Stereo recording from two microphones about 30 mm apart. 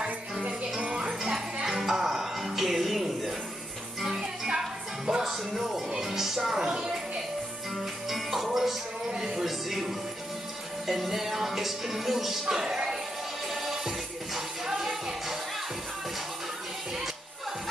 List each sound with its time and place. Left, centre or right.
0.9 s music: right; by 3.3 s centre
4.0 s music: right
5.2 s music: centre
6.5 s music: right
7.7 s music: centre
12.5 s music: right
13.5 s music: centre